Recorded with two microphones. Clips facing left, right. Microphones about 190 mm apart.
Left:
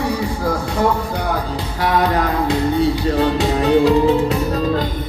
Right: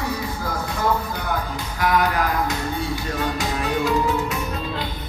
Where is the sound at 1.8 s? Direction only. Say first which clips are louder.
Left 3 dB; 30° left (ahead or behind).